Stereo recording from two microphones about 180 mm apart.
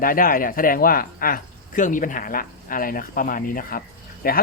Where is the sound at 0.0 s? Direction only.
50° left (ahead or behind).